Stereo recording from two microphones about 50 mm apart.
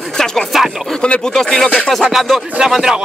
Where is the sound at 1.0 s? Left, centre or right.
Centre.